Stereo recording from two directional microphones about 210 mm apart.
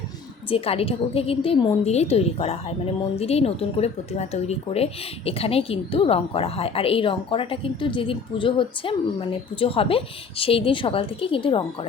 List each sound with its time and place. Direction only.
0.5 s a woman's voice: 25° left (ahead or behind)